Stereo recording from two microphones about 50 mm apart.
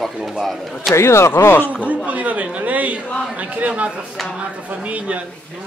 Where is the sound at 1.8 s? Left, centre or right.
Right.